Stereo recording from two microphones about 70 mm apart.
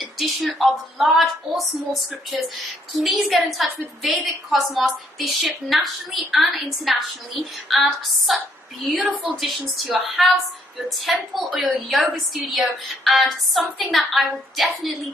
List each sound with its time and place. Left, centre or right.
0.0 s a woman's voice: centre
9.0 s speech: centre
9.4 s a woman's voice: centre